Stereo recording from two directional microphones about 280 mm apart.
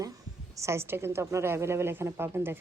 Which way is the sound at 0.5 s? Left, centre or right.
Centre.